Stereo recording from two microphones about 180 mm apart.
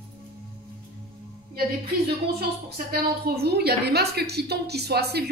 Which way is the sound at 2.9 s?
60° right (ahead or behind).